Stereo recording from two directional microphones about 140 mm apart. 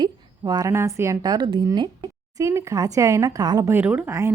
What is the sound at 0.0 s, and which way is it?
A woman's voice, 30° right (ahead or behind).